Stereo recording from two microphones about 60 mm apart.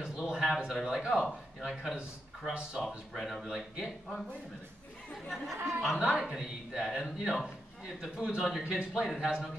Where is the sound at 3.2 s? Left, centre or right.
Centre.